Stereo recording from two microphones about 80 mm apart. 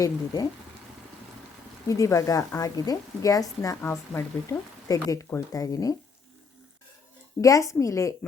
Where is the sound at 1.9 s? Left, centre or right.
Left.